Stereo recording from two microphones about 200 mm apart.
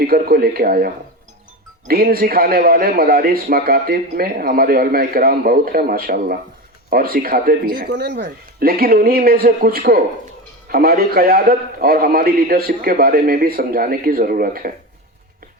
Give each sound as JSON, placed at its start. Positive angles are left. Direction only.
{"t": 0.1, "sound": "a man's voice", "side_deg": -50}
{"t": 1.9, "sound": "a man's voice", "side_deg": -50}